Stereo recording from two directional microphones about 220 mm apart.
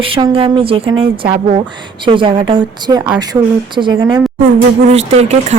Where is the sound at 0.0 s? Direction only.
25° right (ahead or behind).